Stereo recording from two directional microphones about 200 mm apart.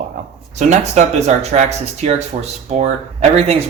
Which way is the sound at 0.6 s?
35° right (ahead or behind).